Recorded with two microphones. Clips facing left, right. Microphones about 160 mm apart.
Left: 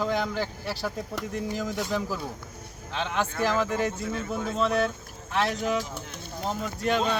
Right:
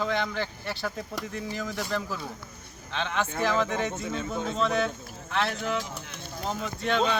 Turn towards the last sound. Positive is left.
turn(degrees=5)  # may be behind; listen again after turning